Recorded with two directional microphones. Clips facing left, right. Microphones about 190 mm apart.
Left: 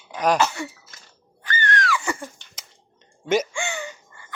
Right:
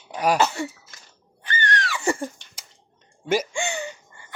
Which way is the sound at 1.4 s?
25° right (ahead or behind).